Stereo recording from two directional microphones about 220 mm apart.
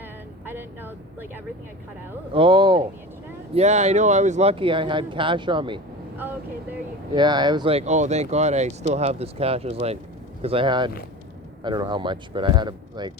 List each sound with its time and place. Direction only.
0.4 s speech: 10° right (ahead or behind)
2.3 s speech: 25° right (ahead or behind)
3.5 s speech: 30° right (ahead or behind)
7.1 s speech: 20° right (ahead or behind)